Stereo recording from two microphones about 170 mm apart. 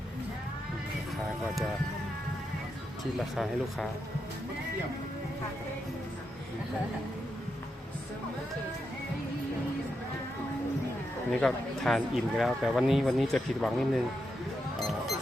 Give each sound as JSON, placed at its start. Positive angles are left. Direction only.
{"t": 3.3, "sound": "a man's voice", "side_deg": 0}
{"t": 11.3, "sound": "a man's voice", "side_deg": 5}